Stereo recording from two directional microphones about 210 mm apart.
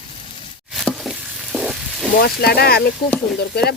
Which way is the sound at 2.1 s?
50° left (ahead or behind).